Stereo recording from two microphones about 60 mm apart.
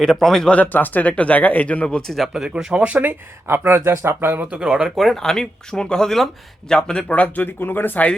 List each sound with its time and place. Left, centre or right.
0.0 s speech: centre
0.5 s speech: left; by 2.3 s centre
2.3 s speech: centre; by 3.2 s right
3.4 s speech: right
4.5 s speech: centre
4.9 s speech: centre; by 7.4 s left
7.4 s speech: left